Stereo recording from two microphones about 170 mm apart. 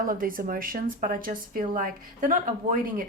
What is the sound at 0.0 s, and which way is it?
A woman's voice, 55° right (ahead or behind).